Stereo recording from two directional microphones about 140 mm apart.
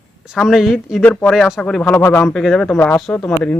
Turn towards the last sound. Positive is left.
turn(degrees=10)  # may be behind; listen again after turning